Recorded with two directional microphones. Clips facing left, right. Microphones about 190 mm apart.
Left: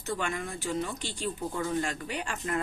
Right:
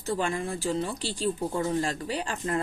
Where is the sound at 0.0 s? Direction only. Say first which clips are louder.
Right 4 dB; 30° right (ahead or behind).